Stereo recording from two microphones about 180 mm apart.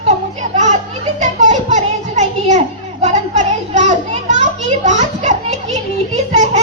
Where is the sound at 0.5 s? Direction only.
40° right (ahead or behind).